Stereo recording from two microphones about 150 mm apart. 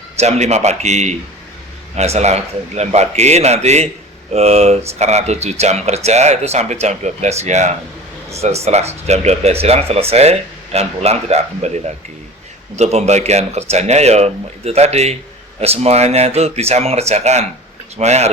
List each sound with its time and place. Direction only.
0.2 s speech: 50° right (ahead or behind)
12.7 s speech: 45° right (ahead or behind)